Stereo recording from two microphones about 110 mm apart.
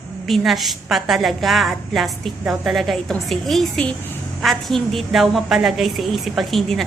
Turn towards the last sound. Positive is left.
turn(degrees=0)  # may be behind; listen again after turning